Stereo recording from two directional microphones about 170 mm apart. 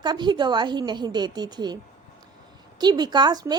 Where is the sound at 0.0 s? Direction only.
25° right (ahead or behind).